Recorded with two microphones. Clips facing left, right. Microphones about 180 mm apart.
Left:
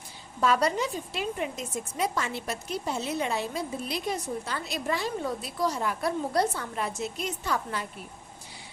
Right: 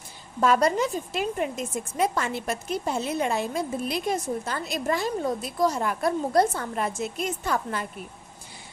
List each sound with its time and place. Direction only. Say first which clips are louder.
0.4 s a woman's voice: right 4 dB; 50° right (ahead or behind)